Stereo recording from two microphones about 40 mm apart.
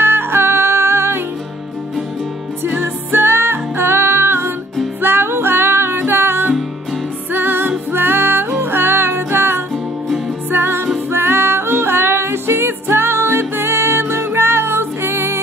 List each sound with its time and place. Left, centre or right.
0.0 s music: right
2.8 s music: right